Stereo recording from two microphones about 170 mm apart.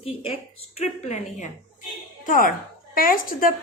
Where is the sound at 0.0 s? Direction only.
30° left (ahead or behind).